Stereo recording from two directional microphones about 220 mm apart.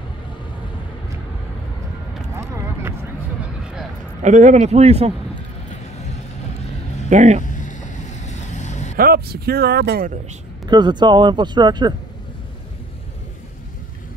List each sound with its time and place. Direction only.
2.4 s a sound: 15° right (ahead or behind)
4.2 s a man's voice: 35° right (ahead or behind)
7.1 s speech: 35° right (ahead or behind)
7.5 s vehicle: 35° left (ahead or behind)
8.9 s speech: 45° right (ahead or behind)
10.7 s speech: 20° right (ahead or behind)